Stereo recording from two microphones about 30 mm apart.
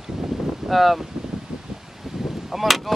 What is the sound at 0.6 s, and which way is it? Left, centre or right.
Speech, centre.